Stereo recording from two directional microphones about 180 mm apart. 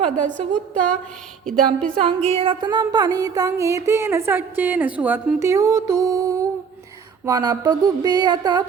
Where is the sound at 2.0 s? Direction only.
30° right (ahead or behind).